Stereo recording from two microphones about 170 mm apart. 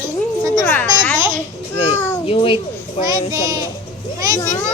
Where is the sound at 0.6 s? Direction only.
10° left (ahead or behind).